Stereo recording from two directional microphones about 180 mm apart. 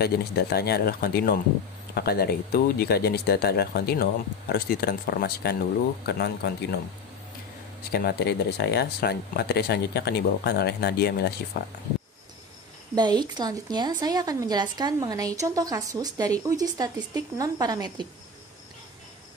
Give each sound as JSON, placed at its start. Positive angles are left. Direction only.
{"t": 0.0, "sound": "speech", "side_deg": 60}
{"t": 7.9, "sound": "speech", "side_deg": 65}
{"t": 12.9, "sound": "a woman's voice", "side_deg": -25}